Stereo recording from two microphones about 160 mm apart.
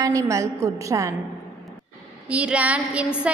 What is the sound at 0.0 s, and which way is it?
A woman's voice, 20° right (ahead or behind).